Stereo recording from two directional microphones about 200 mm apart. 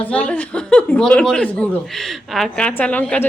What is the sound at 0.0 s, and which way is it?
Speech, 5° left (ahead or behind).